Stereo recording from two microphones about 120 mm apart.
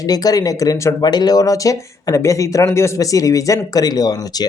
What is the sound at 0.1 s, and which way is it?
Speech, 30° left (ahead or behind).